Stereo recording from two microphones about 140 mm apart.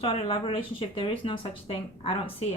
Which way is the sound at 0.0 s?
40° left (ahead or behind).